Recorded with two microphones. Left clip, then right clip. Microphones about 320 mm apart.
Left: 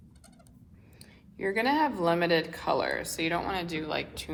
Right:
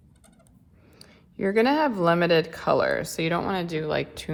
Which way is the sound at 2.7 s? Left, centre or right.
Right.